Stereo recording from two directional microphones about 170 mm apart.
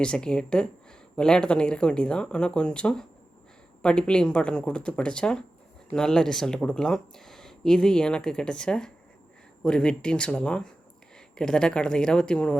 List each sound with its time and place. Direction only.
0.0 s speech: 5° left (ahead or behind)